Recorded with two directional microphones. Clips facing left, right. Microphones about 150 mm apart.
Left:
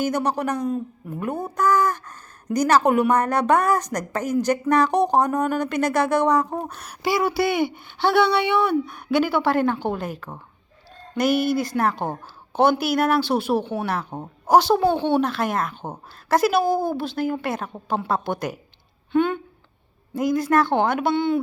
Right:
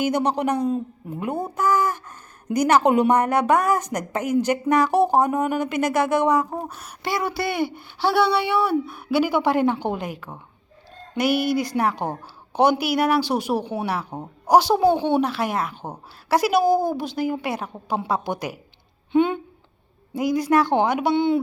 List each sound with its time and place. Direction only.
0.0 s speech: 15° right (ahead or behind)
1.2 s a sound: 10° right (ahead or behind)
2.6 s a woman's voice: 20° right (ahead or behind)